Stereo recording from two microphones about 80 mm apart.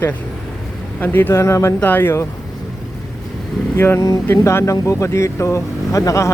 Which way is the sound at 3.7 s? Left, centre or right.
Left.